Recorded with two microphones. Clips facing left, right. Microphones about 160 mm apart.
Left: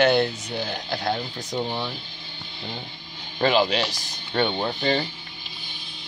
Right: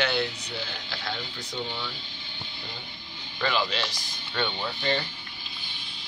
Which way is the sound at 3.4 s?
45° left (ahead or behind).